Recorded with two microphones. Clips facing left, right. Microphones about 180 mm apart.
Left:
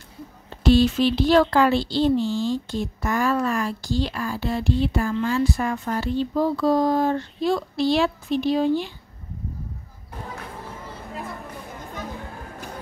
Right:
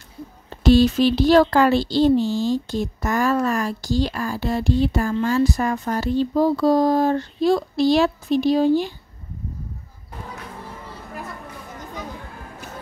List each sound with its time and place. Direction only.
0.7 s speech: 40° right (ahead or behind)